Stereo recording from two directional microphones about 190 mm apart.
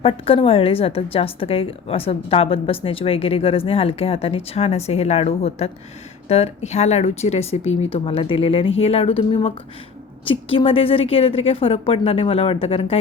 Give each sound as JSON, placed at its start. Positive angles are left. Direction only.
{"t": 0.0, "sound": "a woman's voice", "side_deg": 30}